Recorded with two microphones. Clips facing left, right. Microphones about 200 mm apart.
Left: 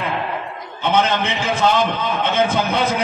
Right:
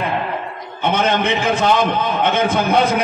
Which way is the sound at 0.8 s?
55° right (ahead or behind).